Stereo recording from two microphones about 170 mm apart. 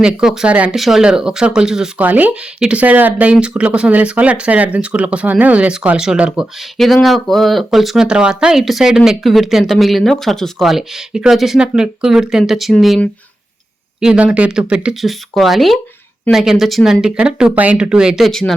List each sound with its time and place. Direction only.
0.0 s speech: 5° right (ahead or behind)